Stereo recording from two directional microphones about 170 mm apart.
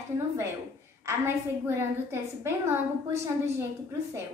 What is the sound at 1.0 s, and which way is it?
A woman's voice, 15° right (ahead or behind).